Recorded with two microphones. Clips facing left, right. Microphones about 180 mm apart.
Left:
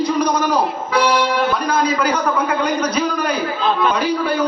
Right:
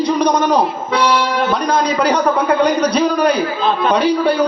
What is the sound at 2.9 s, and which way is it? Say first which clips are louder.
Speech: right 6 dB; 35° right (ahead or behind).